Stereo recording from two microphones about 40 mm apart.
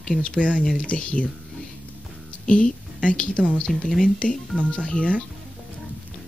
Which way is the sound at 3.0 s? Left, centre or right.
Left.